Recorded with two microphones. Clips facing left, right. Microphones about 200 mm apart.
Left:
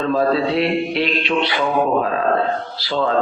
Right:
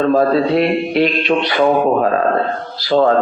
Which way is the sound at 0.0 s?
45° right (ahead or behind).